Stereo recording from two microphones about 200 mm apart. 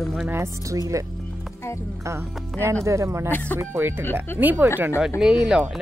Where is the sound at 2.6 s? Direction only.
15° right (ahead or behind).